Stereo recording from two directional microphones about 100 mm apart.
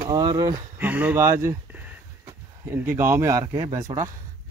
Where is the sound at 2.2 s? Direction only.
25° right (ahead or behind).